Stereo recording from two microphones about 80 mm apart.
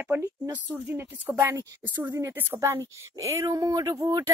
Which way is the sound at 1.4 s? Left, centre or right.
Right.